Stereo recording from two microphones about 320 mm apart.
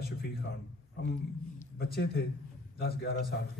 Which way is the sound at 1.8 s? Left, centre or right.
Left.